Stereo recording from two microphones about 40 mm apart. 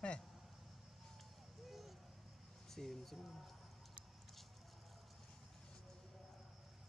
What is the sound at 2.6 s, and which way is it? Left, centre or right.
Speech, centre.